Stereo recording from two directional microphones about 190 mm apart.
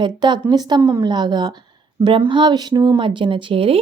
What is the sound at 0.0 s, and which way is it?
A woman's voice, 25° right (ahead or behind).